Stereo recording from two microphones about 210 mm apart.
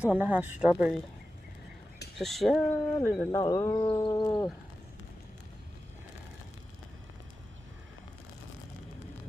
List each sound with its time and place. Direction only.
0.1 s speech: 10° right (ahead or behind)
2.1 s speech: centre (ahead or behind)
4.0 s a sound: 20° left (ahead or behind)